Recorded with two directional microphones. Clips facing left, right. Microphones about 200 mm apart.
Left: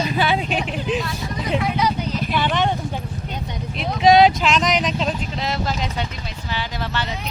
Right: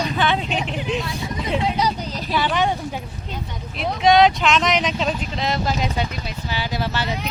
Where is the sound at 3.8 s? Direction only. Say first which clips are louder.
Left 1 dB; centre (ahead or behind).